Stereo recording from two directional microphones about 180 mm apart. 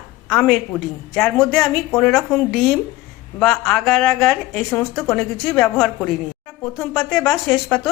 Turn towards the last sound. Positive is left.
turn(degrees=0)  # may be behind; listen again after turning